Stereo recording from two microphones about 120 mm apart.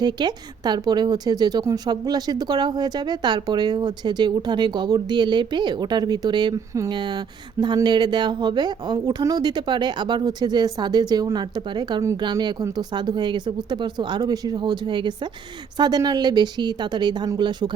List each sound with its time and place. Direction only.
0.0 s a woman's voice: 35° right (ahead or behind)